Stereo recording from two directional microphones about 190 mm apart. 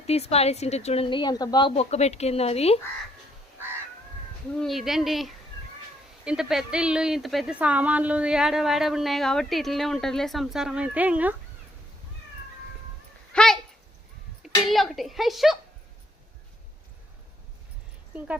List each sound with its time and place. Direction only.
0.1 s a woman's voice: 35° left (ahead or behind)
3.6 s crow: 10° right (ahead or behind)
4.6 s speech: centre (ahead or behind)
13.3 s a sound: 5° left (ahead or behind)
14.7 s speech: centre (ahead or behind)